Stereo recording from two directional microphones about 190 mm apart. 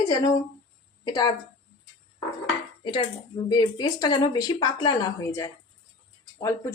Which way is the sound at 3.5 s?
20° left (ahead or behind).